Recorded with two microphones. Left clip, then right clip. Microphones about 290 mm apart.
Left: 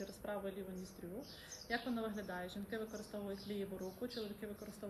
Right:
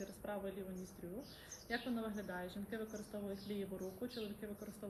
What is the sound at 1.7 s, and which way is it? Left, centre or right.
A woman's voice, centre.